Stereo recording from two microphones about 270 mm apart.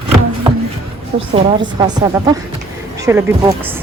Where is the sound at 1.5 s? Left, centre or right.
Centre.